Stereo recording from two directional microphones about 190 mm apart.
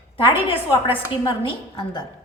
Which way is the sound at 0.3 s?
30° left (ahead or behind).